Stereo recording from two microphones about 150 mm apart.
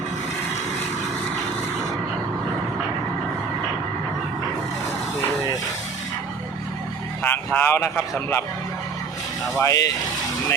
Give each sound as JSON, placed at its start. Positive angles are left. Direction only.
{"t": 7.2, "sound": "vehicle", "side_deg": 15}
{"t": 8.1, "sound": "a man's voice", "side_deg": 15}
{"t": 9.6, "sound": "speech", "side_deg": 20}